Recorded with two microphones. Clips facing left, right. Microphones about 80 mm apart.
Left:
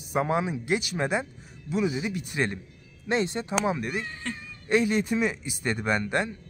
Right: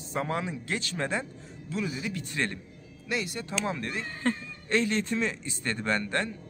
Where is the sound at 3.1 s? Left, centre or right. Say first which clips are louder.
Left 6 dB; left.